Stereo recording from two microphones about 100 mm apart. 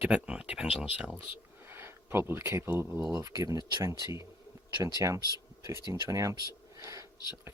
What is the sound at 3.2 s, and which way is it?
Speech, 35° right (ahead or behind).